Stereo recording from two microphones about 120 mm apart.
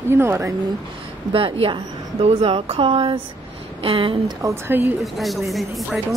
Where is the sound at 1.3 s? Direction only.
50° right (ahead or behind).